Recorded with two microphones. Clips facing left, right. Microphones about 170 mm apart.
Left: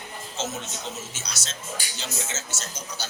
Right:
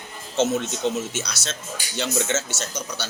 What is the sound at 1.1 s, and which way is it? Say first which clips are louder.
A man's voice: right 8 dB; 65° right (ahead or behind).